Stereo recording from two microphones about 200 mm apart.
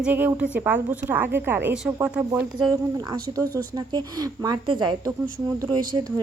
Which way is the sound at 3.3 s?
25° right (ahead or behind).